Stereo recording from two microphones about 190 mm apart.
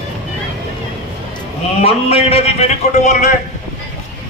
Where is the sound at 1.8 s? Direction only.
30° left (ahead or behind).